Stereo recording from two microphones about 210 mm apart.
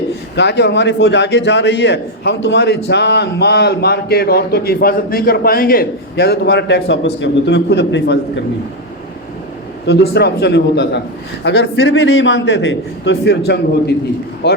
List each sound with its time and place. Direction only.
0.3 s a man's voice: 55° left (ahead or behind)
9.8 s a man's voice: 50° left (ahead or behind)